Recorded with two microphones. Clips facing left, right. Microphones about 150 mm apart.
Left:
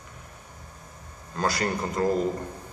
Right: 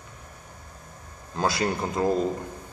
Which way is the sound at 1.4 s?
20° right (ahead or behind).